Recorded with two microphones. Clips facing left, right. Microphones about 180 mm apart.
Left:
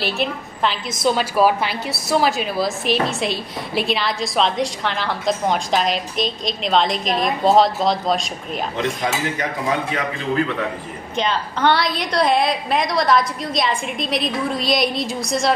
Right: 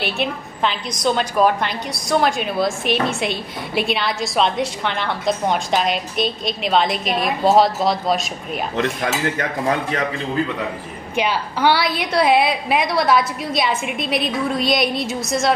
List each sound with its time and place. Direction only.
0.0 s a woman's voice: centre (ahead or behind)
8.7 s speech: 55° right (ahead or behind)
11.1 s a woman's voice: 10° right (ahead or behind)